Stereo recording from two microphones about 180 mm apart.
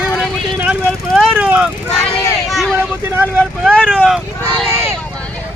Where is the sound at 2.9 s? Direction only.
10° right (ahead or behind).